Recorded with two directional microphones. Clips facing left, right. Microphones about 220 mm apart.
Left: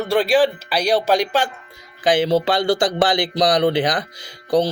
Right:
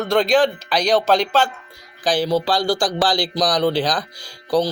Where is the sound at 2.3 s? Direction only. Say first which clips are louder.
Left 2 dB; 25° left (ahead or behind).